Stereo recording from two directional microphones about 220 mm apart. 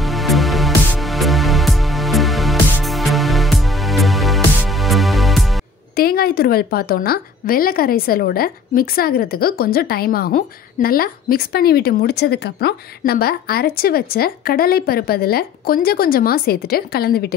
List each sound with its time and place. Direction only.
0.0 s music: centre (ahead or behind)
5.9 s a woman's voice: 45° left (ahead or behind)